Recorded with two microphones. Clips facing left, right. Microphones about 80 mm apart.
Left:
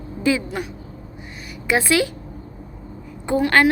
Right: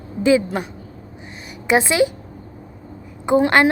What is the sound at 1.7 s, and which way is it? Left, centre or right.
Speech, right.